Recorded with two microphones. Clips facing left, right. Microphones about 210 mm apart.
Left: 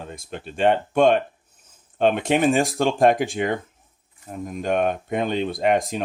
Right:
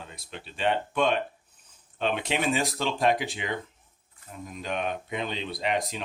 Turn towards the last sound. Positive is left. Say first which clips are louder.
# left 8 dB
turn(degrees=50)  # may be behind; listen again after turning